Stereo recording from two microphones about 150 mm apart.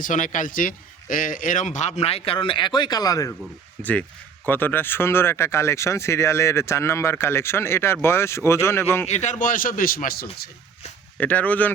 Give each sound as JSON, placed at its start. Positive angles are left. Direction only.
{"t": 0.0, "sound": "a man's voice", "side_deg": 60}
{"t": 4.4, "sound": "speech", "side_deg": 15}
{"t": 9.0, "sound": "a man's voice", "side_deg": 50}
{"t": 11.2, "sound": "speech", "side_deg": 10}